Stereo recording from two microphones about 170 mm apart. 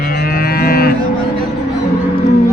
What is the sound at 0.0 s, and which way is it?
Livestock, 60° left (ahead or behind).